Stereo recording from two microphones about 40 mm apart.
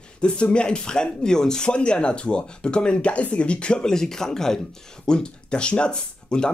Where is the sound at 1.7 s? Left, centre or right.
Left.